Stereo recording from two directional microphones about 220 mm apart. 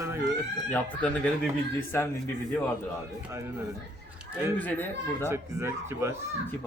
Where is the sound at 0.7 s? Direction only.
5° left (ahead or behind).